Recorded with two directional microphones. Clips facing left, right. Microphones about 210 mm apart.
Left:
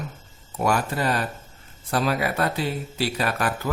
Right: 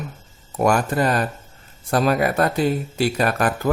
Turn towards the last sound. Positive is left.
turn(degrees=-45)  # may be behind; listen again after turning